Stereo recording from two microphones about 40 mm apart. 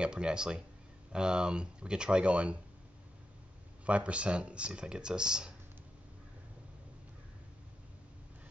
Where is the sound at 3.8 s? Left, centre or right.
Right.